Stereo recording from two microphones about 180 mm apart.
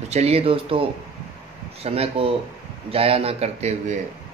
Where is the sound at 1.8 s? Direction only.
35° right (ahead or behind).